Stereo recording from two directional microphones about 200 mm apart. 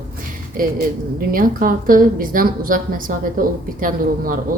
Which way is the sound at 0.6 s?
45° right (ahead or behind).